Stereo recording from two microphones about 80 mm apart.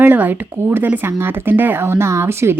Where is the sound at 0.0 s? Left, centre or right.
Right.